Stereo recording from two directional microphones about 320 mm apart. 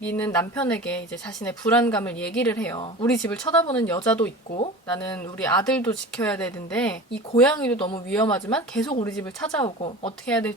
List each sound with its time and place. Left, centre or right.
0.0 s speech: centre
7.8 s speech: centre
8.9 s speech: centre
9.1 s speech: centre
9.6 s speech: centre
10.2 s speech: centre